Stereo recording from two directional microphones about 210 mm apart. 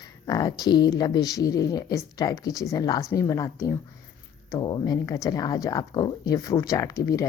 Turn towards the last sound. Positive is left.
turn(degrees=15)  # may be behind; listen again after turning